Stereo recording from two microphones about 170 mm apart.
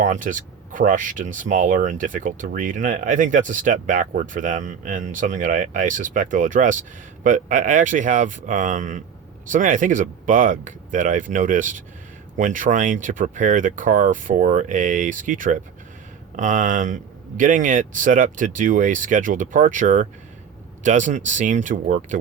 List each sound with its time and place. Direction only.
0.0 s speech: 50° right (ahead or behind)